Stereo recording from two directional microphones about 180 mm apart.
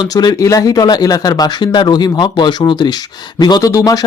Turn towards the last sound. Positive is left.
turn(degrees=20)  # may be behind; listen again after turning